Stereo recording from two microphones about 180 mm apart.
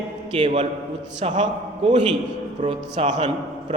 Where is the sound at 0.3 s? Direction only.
35° right (ahead or behind).